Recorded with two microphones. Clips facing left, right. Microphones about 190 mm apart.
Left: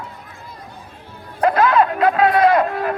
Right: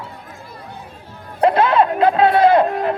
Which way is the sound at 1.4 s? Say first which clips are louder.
Right 1 dB; 30° right (ahead or behind).